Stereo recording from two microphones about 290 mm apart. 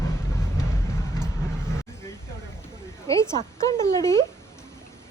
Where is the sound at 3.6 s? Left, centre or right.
Centre.